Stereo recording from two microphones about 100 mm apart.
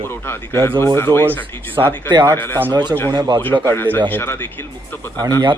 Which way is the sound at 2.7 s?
50° right (ahead or behind).